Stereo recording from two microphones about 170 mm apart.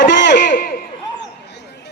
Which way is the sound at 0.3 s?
90° left.